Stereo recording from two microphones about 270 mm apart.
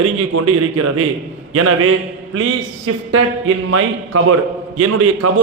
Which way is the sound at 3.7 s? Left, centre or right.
Right.